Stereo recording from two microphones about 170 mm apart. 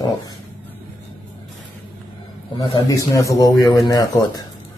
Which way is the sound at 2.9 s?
20° left (ahead or behind).